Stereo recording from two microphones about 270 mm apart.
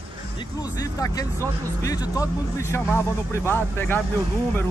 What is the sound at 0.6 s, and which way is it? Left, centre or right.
Speech, centre.